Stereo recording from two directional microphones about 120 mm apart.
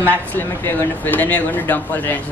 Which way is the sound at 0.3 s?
15° left (ahead or behind).